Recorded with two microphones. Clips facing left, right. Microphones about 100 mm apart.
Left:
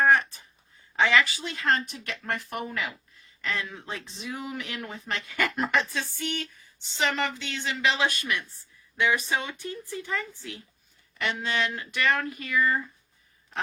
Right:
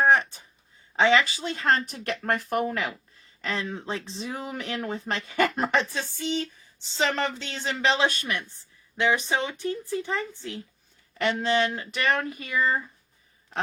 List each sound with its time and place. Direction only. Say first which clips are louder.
0.0 s a sound: right 1 dB; 20° right (ahead or behind)
0.9 s speech: right 2 dB; 25° right (ahead or behind); by 2.9 s 45° right (ahead or behind)
3.4 s speech: right 2 dB; 30° right (ahead or behind)
11.2 s speech: right 5 dB; 45° right (ahead or behind)
11.4 s speech: right 5 dB; 25° right (ahead or behind)